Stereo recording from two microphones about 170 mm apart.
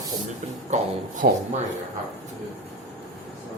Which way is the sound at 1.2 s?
55° right (ahead or behind).